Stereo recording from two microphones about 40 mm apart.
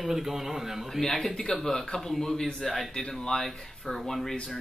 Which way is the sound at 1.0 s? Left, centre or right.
Centre.